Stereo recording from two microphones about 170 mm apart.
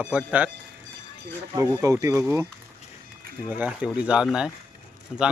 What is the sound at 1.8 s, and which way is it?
Speech, 20° right (ahead or behind).